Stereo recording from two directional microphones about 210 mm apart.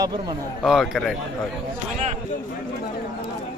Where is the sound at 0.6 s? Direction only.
Centre (ahead or behind).